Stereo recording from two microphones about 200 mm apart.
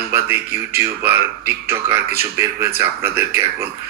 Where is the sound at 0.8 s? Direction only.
10° right (ahead or behind).